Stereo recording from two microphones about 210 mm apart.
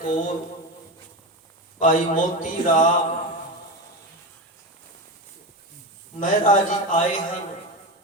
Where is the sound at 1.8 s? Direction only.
40° left (ahead or behind).